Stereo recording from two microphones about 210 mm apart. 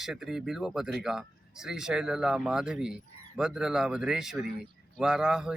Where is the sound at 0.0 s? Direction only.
Centre (ahead or behind).